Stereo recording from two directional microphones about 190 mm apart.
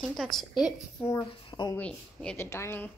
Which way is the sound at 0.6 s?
20° left (ahead or behind).